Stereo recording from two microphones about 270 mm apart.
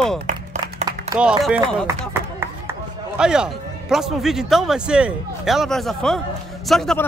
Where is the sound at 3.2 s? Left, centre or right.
Centre.